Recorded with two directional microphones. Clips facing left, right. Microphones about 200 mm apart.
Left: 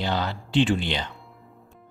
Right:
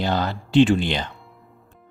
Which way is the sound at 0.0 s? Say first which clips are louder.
Right 4 dB; 45° right (ahead or behind).